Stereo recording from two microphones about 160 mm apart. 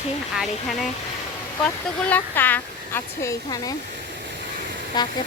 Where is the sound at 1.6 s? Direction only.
10° left (ahead or behind).